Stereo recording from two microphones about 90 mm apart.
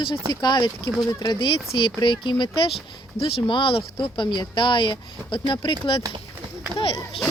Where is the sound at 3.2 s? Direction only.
80° left.